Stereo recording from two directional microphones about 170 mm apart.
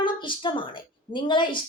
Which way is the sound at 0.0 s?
30° left (ahead or behind).